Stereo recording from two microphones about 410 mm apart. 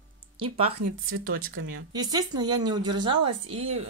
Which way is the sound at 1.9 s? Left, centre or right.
Centre.